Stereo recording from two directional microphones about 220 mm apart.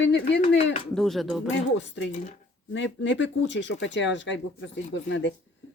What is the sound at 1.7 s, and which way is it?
Speech, 55° left (ahead or behind).